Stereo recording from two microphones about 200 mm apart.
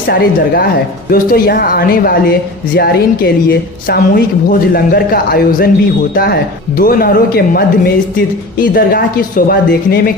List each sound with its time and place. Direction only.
0.1 s speech: 50° left (ahead or behind)